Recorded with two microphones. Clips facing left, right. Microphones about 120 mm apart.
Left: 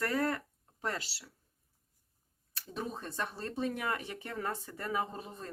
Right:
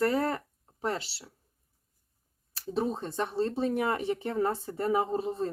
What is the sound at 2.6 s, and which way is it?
Speech, 30° right (ahead or behind).